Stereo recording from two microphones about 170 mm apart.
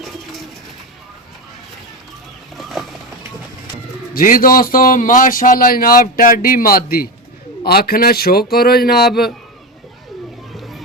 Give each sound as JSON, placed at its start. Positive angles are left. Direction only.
{"t": 2.6, "sound": "boat", "side_deg": 0}
{"t": 4.1, "sound": "a man's voice", "side_deg": 55}
{"t": 10.5, "sound": "a sound", "side_deg": 0}